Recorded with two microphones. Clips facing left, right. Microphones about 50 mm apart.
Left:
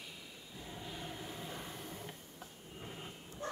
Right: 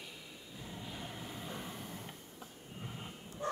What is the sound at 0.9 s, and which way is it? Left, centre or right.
Train, centre.